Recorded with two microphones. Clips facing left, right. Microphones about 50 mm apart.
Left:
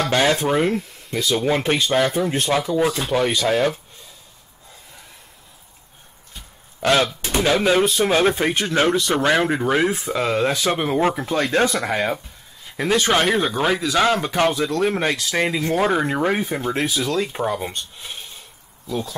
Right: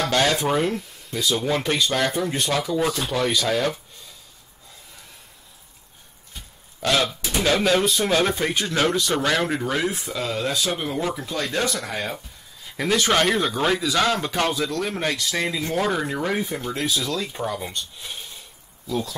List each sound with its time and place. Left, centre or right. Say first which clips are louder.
0.1 s speech: left 3 dB; centre
2.0 s speech: left 4 dB; centre
6.8 s speech: left 4 dB; left
7.4 s speech: left 2 dB; centre
9.9 s speech: left 6 dB; left
12.6 s speech: left 2 dB; centre
14.8 s speech: left 5 dB; left
18.9 s speech: even; centre